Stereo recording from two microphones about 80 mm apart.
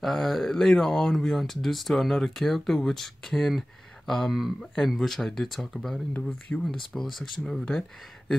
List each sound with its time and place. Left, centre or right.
0.0 s speech: centre
6.1 s speech: centre
6.9 s speech: centre